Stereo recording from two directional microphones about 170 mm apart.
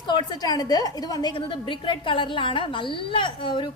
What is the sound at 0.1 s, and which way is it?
A woman's voice, 25° left (ahead or behind).